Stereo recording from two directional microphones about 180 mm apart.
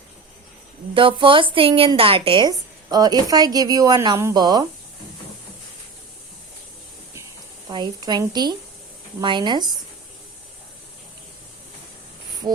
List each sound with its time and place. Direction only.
0.9 s a woman's voice: 30° right (ahead or behind)
7.7 s a woman's voice: 25° right (ahead or behind)